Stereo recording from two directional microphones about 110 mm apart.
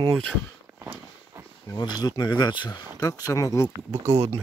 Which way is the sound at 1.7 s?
40° left (ahead or behind).